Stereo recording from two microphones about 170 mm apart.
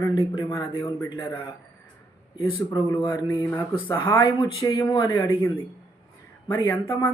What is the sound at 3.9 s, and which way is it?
A man's voice, 25° left (ahead or behind).